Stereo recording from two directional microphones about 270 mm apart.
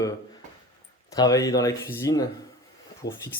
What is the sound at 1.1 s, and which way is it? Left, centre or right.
Speech, centre.